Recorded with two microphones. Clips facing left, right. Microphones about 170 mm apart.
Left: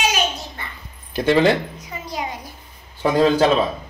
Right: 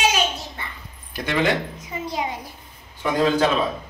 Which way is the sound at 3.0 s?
35° left (ahead or behind).